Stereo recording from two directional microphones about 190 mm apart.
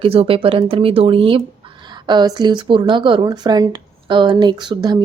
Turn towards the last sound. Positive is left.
turn(degrees=-20)  # may be behind; listen again after turning